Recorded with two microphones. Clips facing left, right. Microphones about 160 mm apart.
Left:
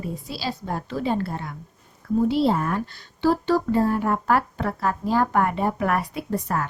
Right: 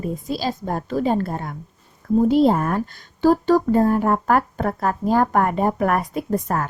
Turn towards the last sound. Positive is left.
turn(degrees=-45)  # may be behind; listen again after turning